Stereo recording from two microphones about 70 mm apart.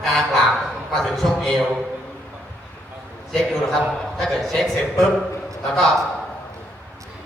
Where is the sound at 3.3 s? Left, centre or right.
Centre.